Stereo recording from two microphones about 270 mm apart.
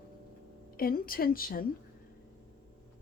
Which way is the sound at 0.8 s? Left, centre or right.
Left.